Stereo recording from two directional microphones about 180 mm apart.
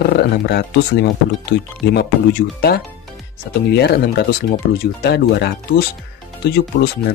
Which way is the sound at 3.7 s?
65° left (ahead or behind).